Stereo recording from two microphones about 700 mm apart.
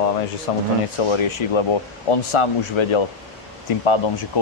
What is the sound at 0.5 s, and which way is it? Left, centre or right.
Speech, left.